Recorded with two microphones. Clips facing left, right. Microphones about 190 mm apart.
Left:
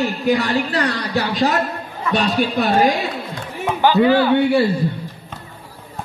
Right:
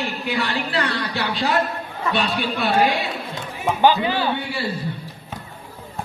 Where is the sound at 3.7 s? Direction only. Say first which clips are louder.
Left 4 dB; 15° right (ahead or behind).